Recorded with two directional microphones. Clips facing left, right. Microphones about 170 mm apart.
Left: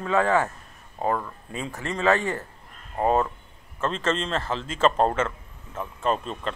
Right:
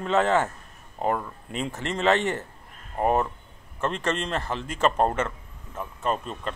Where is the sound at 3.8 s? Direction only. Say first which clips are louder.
Left 1 dB; 15° right (ahead or behind).